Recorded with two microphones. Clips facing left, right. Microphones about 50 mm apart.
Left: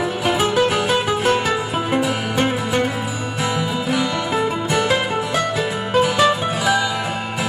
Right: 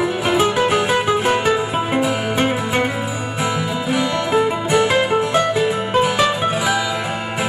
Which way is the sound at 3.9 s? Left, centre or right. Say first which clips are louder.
Right 5 dB; centre.